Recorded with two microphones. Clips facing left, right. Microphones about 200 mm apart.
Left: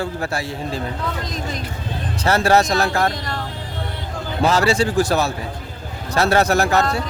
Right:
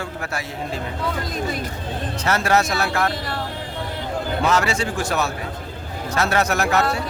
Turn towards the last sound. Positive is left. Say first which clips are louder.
# left 3 dB
turn(degrees=35)  # may be behind; listen again after turning